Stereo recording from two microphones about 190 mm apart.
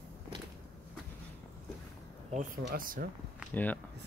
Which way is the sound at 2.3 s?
45° right (ahead or behind).